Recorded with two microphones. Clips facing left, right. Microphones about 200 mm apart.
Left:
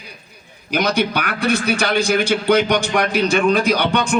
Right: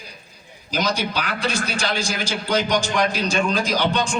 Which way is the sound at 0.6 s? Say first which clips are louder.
Left 5 dB; 60° left (ahead or behind).